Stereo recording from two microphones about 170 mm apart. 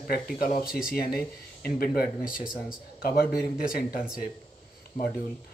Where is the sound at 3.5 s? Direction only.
60° left (ahead or behind).